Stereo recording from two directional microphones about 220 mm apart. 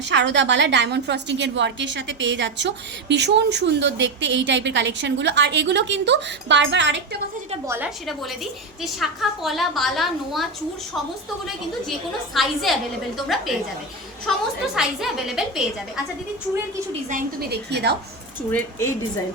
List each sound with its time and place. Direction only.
0.0 s a woman's voice: 55° right (ahead or behind)
7.7 s a woman's voice: 5° right (ahead or behind)
12.3 s a woman's voice: centre (ahead or behind)
17.1 s a woman's voice: 40° right (ahead or behind)
18.5 s speech: 10° left (ahead or behind)